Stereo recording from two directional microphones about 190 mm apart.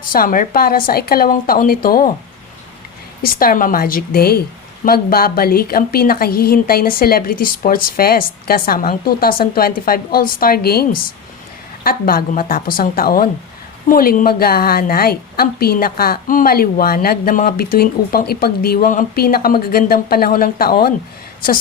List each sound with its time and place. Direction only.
0.1 s a woman's voice: 45° left (ahead or behind)
3.2 s a woman's voice: 50° left (ahead or behind)